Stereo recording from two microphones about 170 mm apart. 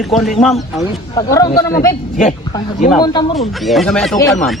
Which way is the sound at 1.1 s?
20° left (ahead or behind).